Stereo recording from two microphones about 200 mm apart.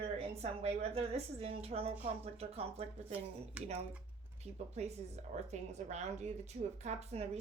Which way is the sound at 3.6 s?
5° right (ahead or behind).